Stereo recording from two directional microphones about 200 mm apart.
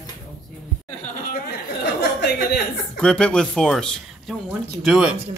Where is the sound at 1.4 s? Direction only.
50° left (ahead or behind).